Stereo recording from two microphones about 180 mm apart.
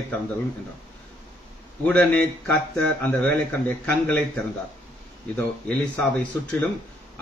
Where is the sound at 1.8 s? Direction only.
5° left (ahead or behind).